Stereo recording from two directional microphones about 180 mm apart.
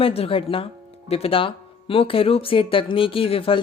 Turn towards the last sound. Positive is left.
turn(degrees=30)  # may be behind; listen again after turning